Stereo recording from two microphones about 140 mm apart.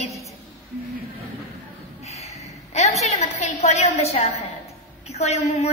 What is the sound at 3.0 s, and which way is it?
A woman's voice, 50° left (ahead or behind).